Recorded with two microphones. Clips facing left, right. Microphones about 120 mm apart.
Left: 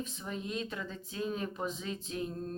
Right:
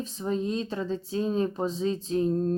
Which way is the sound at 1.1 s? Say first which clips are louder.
Right 8 dB; 30° right (ahead or behind).